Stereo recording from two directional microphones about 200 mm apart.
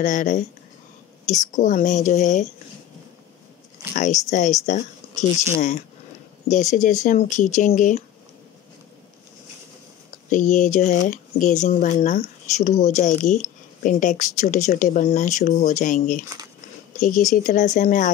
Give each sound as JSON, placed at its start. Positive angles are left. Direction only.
{"t": 0.0, "sound": "speech", "side_deg": 40}
{"t": 3.9, "sound": "speech", "side_deg": 40}
{"t": 10.3, "sound": "speech", "side_deg": 40}